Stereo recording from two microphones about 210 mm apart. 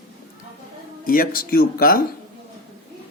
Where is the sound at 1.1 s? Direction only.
45° left (ahead or behind).